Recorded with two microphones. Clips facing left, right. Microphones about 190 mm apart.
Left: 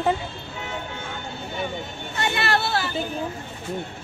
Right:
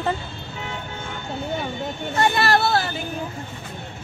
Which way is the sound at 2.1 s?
40° right (ahead or behind).